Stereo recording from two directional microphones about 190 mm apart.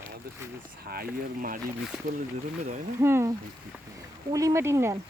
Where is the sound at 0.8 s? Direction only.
50° right (ahead or behind).